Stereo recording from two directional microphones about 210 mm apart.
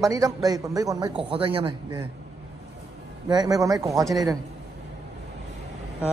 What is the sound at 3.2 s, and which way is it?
Speech, 20° right (ahead or behind).